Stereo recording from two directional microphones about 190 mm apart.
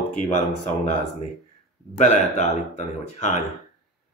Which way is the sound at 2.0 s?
35° left (ahead or behind).